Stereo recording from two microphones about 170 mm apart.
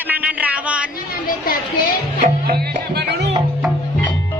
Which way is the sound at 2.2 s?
50° right (ahead or behind).